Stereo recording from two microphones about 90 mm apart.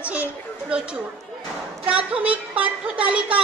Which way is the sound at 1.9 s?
15° right (ahead or behind).